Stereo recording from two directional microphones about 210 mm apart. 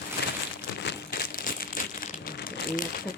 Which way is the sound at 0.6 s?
55° left (ahead or behind).